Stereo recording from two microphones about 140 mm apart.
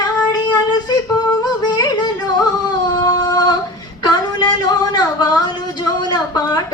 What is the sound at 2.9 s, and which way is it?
Singing, 30° left (ahead or behind).